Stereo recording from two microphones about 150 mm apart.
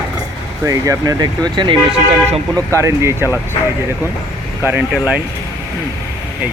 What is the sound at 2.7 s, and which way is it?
Speech, 20° right (ahead or behind).